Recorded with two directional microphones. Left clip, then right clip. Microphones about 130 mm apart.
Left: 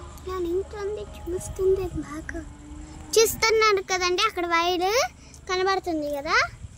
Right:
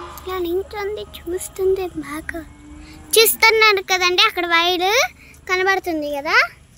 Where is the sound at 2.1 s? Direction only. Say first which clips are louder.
Right 7 dB; 35° right (ahead or behind).